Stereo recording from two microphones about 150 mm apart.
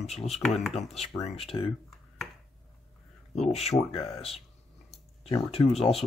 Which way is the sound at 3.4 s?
45° left (ahead or behind).